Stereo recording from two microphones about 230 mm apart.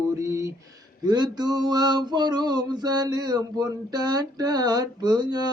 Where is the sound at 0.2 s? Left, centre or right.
Centre.